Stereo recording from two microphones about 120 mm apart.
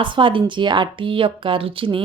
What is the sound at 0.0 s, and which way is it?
Speech, 45° right (ahead or behind).